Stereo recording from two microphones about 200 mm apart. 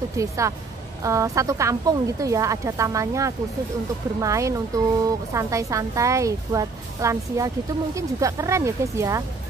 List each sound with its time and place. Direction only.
0.2 s speech: 15° right (ahead or behind)